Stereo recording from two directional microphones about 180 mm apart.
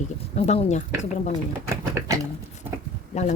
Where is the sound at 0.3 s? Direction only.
35° left (ahead or behind).